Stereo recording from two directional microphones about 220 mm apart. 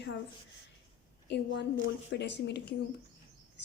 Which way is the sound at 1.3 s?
50° left (ahead or behind).